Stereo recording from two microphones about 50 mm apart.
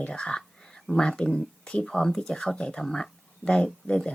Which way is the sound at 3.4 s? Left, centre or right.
Left.